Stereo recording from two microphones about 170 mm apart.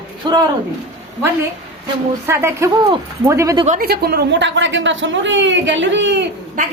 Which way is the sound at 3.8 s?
70° right (ahead or behind).